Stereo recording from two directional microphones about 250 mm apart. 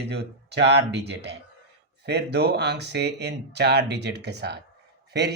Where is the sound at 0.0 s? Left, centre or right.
Right.